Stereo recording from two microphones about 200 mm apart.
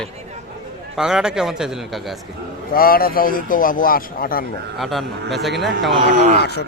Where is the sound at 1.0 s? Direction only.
Centre (ahead or behind).